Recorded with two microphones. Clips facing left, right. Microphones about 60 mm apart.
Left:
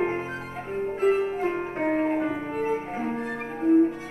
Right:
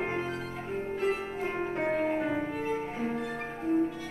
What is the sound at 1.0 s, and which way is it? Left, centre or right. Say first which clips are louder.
Music: left 10 dB; left.